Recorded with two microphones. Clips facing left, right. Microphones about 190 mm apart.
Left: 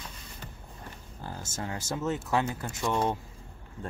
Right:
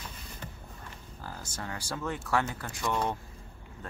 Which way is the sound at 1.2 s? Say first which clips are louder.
Left 3 dB; 25° left (ahead or behind).